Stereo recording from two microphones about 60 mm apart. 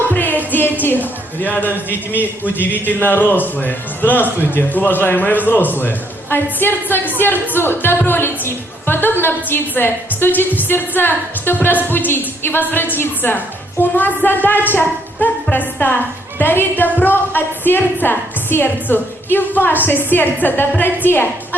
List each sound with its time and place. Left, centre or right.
0.1 s music: left
1.4 s a man's voice: left